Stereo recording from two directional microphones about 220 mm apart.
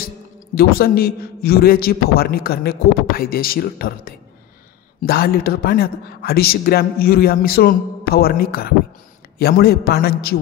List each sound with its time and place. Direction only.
0.6 s a man's voice: 45° left (ahead or behind)